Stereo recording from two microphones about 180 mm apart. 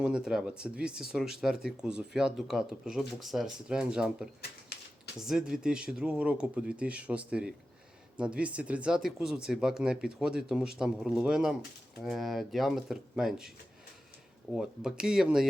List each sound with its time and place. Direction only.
0.0 s speech: 5° right (ahead or behind)
14.5 s speech: 5° right (ahead or behind)